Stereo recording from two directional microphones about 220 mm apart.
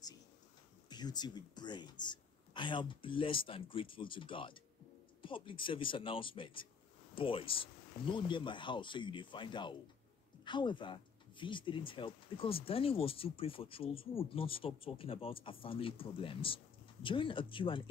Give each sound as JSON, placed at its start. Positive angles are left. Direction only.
{"t": 0.8, "sound": "speech", "side_deg": 20}